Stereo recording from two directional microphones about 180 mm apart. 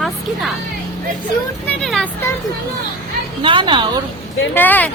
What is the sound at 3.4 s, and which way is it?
Speech, 25° right (ahead or behind).